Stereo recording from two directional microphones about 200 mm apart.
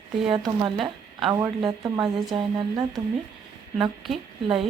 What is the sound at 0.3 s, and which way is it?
Speech, 20° right (ahead or behind).